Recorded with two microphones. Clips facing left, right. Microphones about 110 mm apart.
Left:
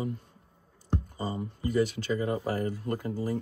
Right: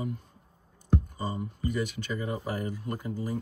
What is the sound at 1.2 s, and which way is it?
Speech, 45° left (ahead or behind).